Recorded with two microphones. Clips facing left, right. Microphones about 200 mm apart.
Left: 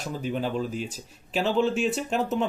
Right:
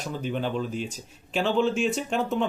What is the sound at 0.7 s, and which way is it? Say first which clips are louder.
Speech: right 1 dB; 40° left (ahead or behind).